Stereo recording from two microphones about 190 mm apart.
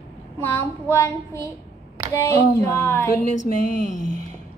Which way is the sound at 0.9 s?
15° left (ahead or behind).